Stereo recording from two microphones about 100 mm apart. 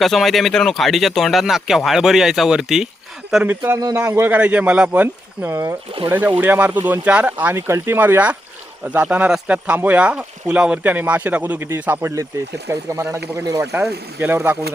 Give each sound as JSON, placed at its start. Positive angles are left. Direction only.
{"t": 0.0, "sound": "speech", "side_deg": 0}
{"t": 3.4, "sound": "speech", "side_deg": -20}